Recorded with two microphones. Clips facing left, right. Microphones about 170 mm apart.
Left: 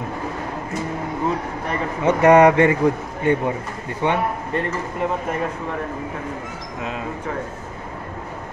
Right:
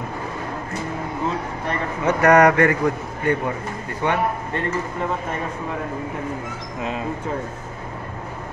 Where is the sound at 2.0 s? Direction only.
25° left (ahead or behind).